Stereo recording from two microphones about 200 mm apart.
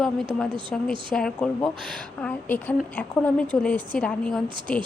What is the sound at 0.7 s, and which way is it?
A woman's voice, 5° left (ahead or behind).